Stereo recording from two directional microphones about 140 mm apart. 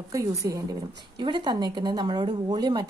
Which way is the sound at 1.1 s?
35° right (ahead or behind).